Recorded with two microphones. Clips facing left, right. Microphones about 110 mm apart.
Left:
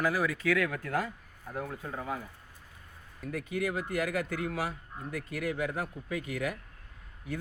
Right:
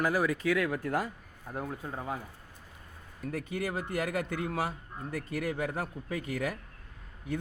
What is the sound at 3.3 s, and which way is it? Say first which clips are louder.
A man's voice: left 1 dB; 30° right (ahead or behind).